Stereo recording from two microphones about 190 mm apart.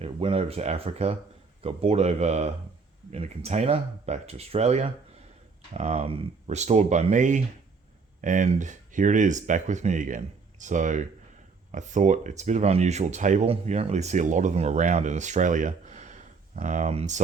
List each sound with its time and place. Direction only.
0.0 s speech: 30° right (ahead or behind)